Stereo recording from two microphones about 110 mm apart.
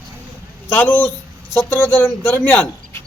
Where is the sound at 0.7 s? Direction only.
15° left (ahead or behind).